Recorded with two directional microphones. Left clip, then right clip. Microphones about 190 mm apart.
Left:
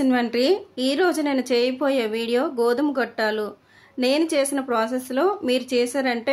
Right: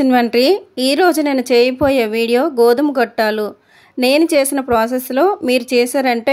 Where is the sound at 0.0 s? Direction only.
35° right (ahead or behind).